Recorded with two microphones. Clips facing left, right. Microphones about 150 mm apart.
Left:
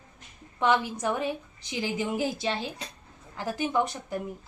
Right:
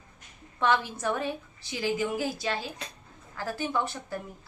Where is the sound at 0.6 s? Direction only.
15° left (ahead or behind).